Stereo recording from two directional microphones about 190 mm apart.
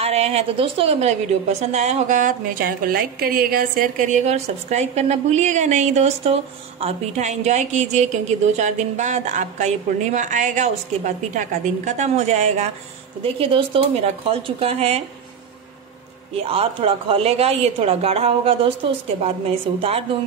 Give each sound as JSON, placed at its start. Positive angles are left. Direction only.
{"t": 0.0, "sound": "a woman's voice", "side_deg": -35}
{"t": 16.3, "sound": "a woman's voice", "side_deg": -30}